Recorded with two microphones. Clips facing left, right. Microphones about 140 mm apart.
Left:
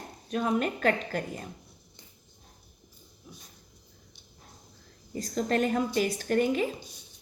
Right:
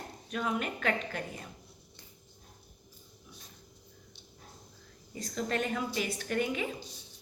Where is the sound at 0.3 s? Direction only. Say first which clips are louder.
Left 6 dB; 35° left (ahead or behind).